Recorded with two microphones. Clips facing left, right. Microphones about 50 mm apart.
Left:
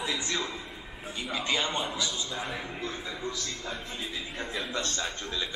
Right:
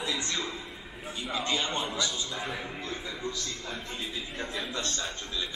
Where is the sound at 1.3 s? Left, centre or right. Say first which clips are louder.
Even; left.